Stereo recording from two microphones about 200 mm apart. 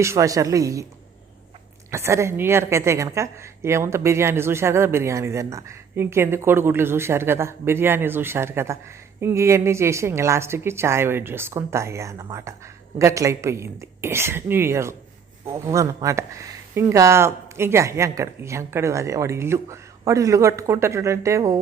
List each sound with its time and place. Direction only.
0.0 s a woman's voice: 15° right (ahead or behind)
1.9 s a woman's voice: 15° right (ahead or behind)